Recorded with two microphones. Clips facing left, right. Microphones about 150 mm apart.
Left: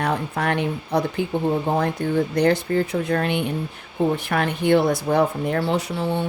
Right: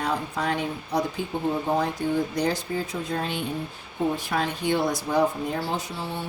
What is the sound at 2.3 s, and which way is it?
Speech, 65° left (ahead or behind).